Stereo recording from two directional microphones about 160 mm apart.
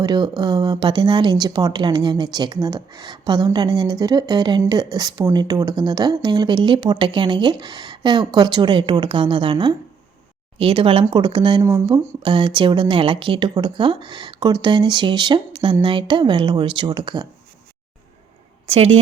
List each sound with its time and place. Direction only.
0.0 s speech: 25° right (ahead or behind)
11.6 s speech: 20° right (ahead or behind)
12.2 s speech: 30° right (ahead or behind)
18.7 s speech: 40° right (ahead or behind)